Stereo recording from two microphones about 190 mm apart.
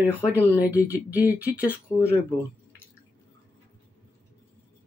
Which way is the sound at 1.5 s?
15° left (ahead or behind).